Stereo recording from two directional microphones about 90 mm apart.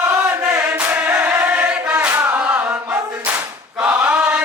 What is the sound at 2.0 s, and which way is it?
Music, 25° right (ahead or behind).